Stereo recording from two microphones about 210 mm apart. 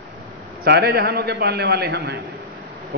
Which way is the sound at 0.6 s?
50° right (ahead or behind).